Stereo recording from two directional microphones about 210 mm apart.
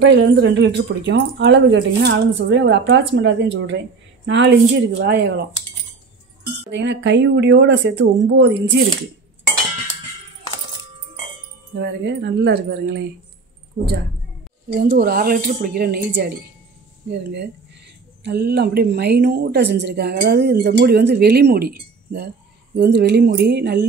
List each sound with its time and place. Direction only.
0.0 s speech: 60° right (ahead or behind)
6.7 s speech: 55° right (ahead or behind)
11.8 s a woman's voice: 55° right (ahead or behind)
14.7 s a woman's voice: 50° right (ahead or behind)